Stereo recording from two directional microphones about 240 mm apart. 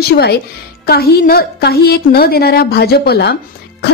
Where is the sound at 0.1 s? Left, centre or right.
Left.